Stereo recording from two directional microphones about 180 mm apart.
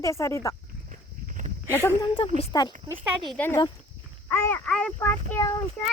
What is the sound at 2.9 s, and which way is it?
Speech, 10° right (ahead or behind).